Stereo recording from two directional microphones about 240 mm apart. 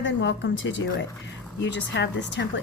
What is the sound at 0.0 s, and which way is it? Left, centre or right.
Speech, left.